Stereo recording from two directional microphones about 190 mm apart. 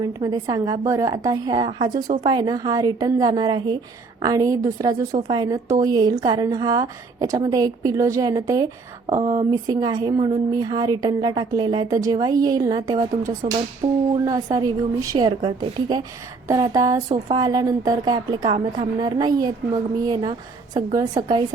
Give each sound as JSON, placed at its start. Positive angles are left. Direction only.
{"t": 0.0, "sound": "a woman's voice", "side_deg": -20}
{"t": 13.8, "sound": "speech", "side_deg": -30}
{"t": 14.3, "sound": "a woman's voice", "side_deg": -20}